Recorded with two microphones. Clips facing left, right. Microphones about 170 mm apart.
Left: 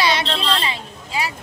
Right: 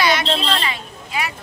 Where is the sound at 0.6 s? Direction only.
30° left (ahead or behind).